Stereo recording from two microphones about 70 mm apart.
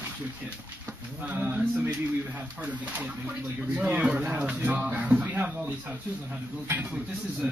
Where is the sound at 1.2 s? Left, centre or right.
Centre.